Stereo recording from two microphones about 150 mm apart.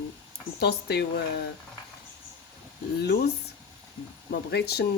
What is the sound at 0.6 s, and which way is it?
Speech, 90° left.